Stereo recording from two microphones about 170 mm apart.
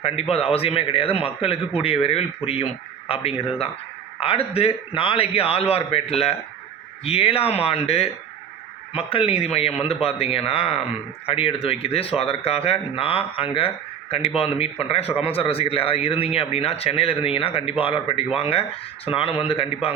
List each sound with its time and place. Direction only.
0.0 s speech: 35° left (ahead or behind)